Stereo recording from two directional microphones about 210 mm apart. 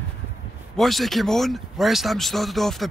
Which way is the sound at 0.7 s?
Centre (ahead or behind).